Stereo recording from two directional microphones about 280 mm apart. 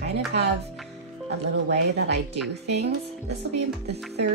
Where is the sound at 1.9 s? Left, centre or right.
Right.